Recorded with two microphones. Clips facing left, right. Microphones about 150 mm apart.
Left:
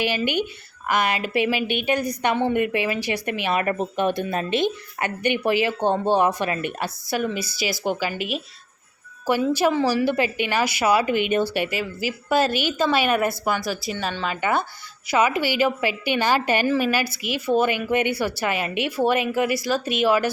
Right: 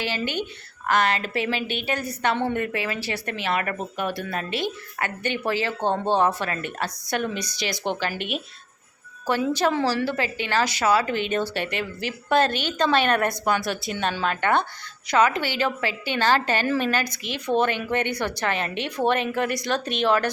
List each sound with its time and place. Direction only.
0.0 s a woman's voice: 15° left (ahead or behind)
7.1 s a woman's voice: 5° left (ahead or behind)
9.5 s a woman's voice: 10° left (ahead or behind)